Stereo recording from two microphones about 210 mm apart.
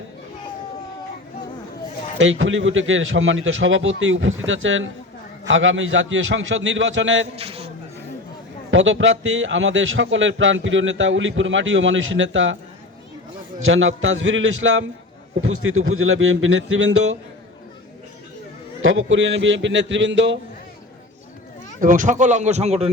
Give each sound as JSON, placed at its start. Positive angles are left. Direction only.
{"t": 2.1, "sound": "a man's voice", "side_deg": -65}
{"t": 7.3, "sound": "a sound", "side_deg": -30}
{"t": 8.7, "sound": "a man's voice", "side_deg": -65}
{"t": 13.7, "sound": "a man's voice", "side_deg": -70}
{"t": 18.8, "sound": "a man's voice", "side_deg": -65}
{"t": 21.8, "sound": "speech", "side_deg": -40}